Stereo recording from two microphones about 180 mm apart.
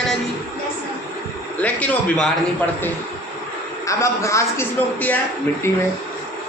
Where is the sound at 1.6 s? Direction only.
10° left (ahead or behind).